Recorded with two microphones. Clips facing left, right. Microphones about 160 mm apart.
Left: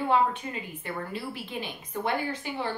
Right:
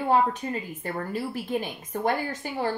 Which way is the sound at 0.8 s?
45° right (ahead or behind).